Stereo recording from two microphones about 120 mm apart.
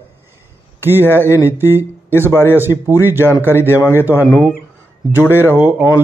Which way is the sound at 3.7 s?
20° left (ahead or behind).